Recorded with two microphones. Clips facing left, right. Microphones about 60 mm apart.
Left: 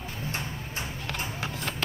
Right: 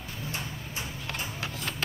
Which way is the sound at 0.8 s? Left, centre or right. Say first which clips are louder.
Left 2 dB; left.